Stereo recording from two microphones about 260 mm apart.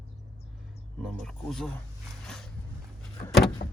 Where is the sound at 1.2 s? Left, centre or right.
Centre.